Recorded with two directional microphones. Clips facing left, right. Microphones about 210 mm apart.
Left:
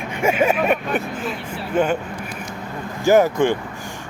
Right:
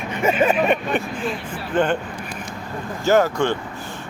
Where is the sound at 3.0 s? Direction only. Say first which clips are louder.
Left 3 dB; 15° left (ahead or behind).